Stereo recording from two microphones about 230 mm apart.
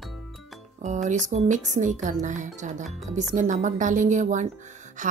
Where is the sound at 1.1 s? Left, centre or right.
Right.